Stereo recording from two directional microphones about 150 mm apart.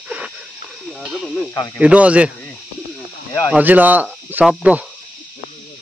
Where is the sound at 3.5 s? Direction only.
10° right (ahead or behind).